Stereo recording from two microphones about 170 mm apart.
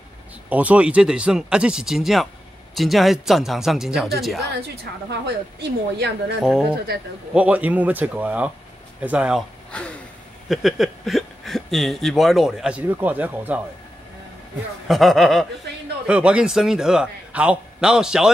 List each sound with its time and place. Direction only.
0.5 s a man's voice: 10° right (ahead or behind)
5.2 s a woman's voice: 80° right
7.3 s speech: 10° right (ahead or behind)
9.7 s speech: 5° left (ahead or behind); by 13.6 s 10° right (ahead or behind)
14.9 s a man's voice: centre (ahead or behind)